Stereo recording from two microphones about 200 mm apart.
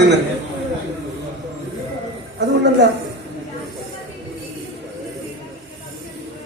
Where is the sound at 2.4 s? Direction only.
60° right (ahead or behind).